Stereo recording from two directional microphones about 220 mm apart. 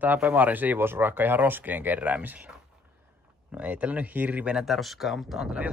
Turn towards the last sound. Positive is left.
turn(degrees=-5)  # may be behind; listen again after turning